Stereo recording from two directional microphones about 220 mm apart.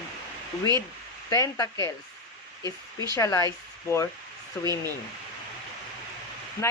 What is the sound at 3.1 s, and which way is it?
Speech, 15° left (ahead or behind).